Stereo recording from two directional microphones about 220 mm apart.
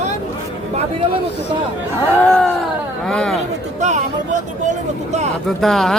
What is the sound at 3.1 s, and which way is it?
Chatter, 5° left (ahead or behind).